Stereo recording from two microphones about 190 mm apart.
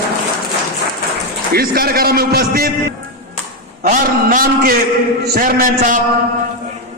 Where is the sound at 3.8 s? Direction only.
45° right (ahead or behind).